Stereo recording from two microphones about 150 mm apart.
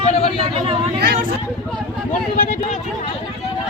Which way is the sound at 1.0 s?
70° right (ahead or behind).